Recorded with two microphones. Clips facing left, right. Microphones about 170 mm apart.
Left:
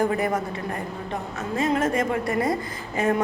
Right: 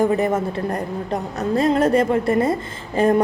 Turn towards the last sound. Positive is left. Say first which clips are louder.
# right 6 dB
turn(degrees=-30)  # may be behind; listen again after turning